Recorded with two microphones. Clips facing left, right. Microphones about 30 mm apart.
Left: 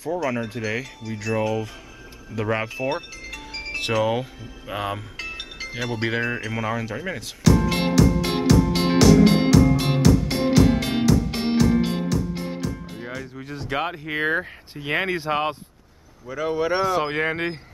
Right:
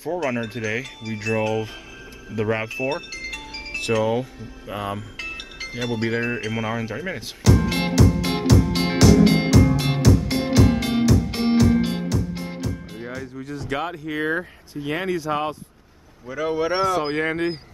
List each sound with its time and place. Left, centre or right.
0.1 s speech: centre
0.6 s wind chime: centre
1.3 s speech: centre
2.3 s music: centre
3.9 s speech: centre
5.9 s speech: left
6.2 s speech: centre
7.7 s music: centre
13.4 s speech: centre
16.3 s speech: centre
16.9 s speech: centre